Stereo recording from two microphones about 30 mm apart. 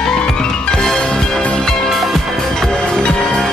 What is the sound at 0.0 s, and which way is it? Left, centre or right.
Music, left.